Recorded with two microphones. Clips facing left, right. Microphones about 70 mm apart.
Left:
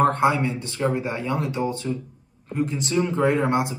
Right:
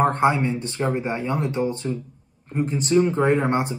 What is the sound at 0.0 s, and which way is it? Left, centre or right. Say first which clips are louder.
Speech: even; right.